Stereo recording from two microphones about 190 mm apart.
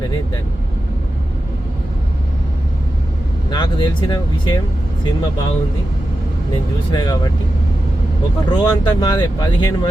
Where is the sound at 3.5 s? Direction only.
25° left (ahead or behind).